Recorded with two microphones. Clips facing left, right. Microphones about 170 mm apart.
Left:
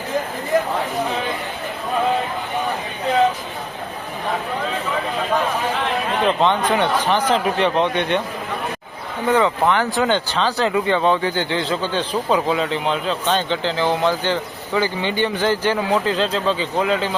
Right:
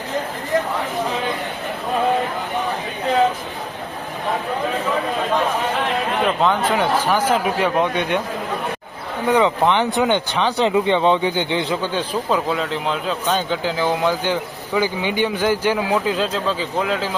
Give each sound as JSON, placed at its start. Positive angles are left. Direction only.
{"t": 6.2, "sound": "speech", "side_deg": -5}
{"t": 9.3, "sound": "speech", "side_deg": -20}
{"t": 12.3, "sound": "speech", "side_deg": 0}